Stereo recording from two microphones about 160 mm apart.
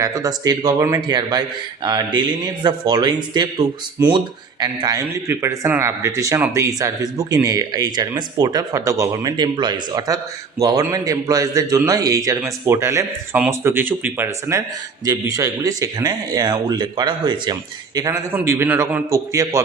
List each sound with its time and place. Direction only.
0.0 s speech: 20° right (ahead or behind)
4.0 s speech: 15° right (ahead or behind)